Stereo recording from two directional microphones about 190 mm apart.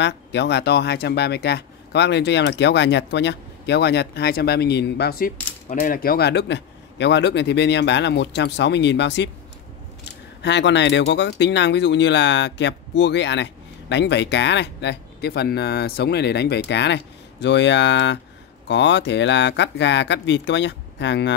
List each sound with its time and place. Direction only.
0.0 s speech: 65° left (ahead or behind)
5.7 s speech: 45° left (ahead or behind); by 9.3 s 65° left (ahead or behind)
10.4 s speech: 70° left (ahead or behind)